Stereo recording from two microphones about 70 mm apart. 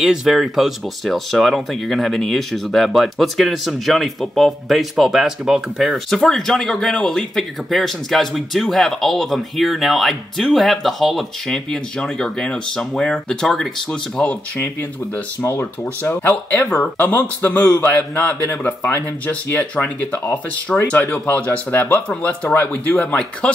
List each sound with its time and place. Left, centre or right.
0.0 s speech: centre
14.6 s speech: left
18.8 s speech: left
19.2 s speech: left